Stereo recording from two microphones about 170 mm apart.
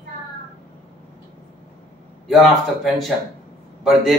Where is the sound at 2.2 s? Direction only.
Centre (ahead or behind).